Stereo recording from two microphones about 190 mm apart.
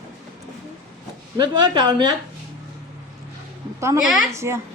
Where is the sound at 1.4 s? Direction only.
25° right (ahead or behind).